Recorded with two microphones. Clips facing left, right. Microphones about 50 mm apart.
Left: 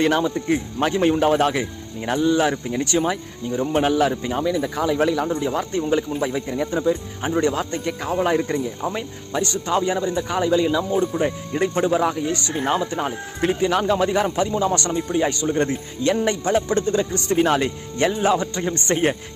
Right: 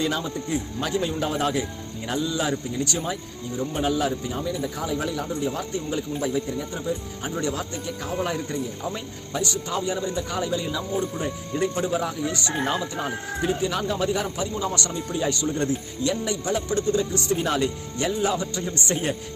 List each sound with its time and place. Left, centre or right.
0.0 s a man's voice: left
4.2 s speech: left
5.3 s a man's voice: left
10.5 s speech: left
11.2 s a man's voice: left
14.5 s a man's voice: left
15.1 s speech: left